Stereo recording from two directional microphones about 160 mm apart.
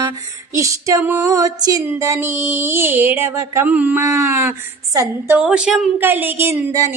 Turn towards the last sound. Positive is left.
turn(degrees=-20)  # may be behind; listen again after turning